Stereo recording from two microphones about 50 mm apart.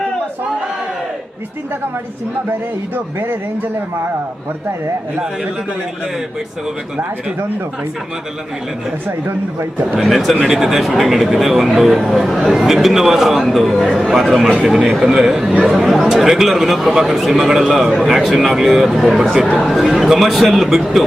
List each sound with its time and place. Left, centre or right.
2.5 s a man's voice: right
10.0 s a man's voice: centre